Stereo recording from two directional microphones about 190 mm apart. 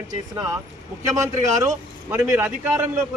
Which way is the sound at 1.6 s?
15° right (ahead or behind).